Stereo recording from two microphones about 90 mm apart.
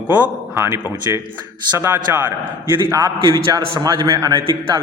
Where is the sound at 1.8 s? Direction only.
25° right (ahead or behind).